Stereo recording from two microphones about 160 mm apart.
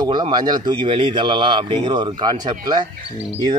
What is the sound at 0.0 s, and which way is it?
A man's voice, 25° right (ahead or behind).